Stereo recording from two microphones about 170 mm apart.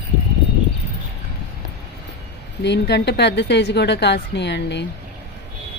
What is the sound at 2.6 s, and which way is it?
A woman's voice, 80° left.